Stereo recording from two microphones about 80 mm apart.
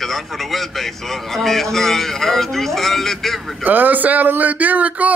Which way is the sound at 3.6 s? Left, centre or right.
Right.